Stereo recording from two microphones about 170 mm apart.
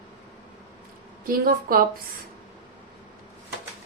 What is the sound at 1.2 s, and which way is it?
Speech, 60° right (ahead or behind).